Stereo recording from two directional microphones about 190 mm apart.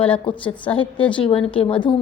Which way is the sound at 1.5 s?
30° left (ahead or behind).